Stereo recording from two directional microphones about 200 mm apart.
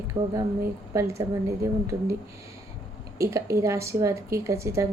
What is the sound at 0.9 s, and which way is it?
Speech, 15° right (ahead or behind).